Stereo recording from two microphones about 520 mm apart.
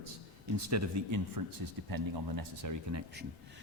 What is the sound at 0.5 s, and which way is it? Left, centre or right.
Speech, right.